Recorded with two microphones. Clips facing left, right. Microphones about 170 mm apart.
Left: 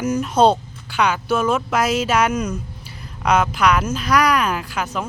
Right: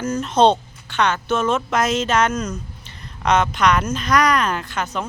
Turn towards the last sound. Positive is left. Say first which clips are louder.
# even
turn(degrees=5)  # may be behind; listen again after turning